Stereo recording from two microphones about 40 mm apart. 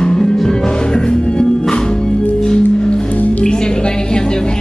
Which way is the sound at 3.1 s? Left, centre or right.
Left.